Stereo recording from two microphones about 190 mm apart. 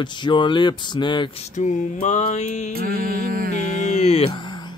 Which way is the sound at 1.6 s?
40° left (ahead or behind).